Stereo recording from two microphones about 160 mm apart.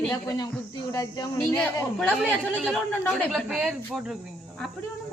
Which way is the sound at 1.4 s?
10° left (ahead or behind).